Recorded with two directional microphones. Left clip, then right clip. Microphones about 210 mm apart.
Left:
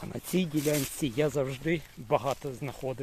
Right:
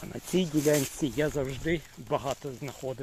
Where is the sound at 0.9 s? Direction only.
20° left (ahead or behind).